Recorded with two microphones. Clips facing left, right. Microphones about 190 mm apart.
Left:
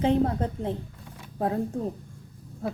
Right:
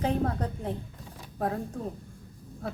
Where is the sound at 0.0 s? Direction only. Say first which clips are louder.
Left 5 dB; 25° left (ahead or behind).